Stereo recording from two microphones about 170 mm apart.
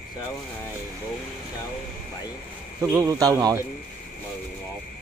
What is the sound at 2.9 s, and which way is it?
Speech, 20° right (ahead or behind).